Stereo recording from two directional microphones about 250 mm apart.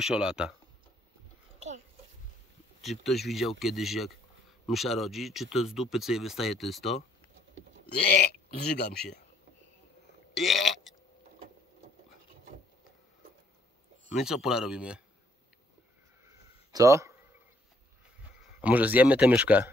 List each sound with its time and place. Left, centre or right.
0.0 s speech: centre
2.8 s speech: centre
7.8 s a man's voice: left
10.3 s burping: centre
14.0 s speech: centre
16.7 s speech: centre
18.6 s speech: centre